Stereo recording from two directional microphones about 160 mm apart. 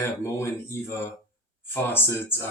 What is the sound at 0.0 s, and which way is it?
Speech, 15° left (ahead or behind).